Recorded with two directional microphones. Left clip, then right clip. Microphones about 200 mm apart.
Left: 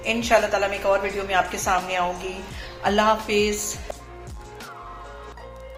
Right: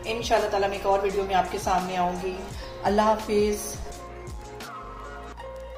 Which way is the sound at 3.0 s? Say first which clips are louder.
Left 3 dB; 5° left (ahead or behind).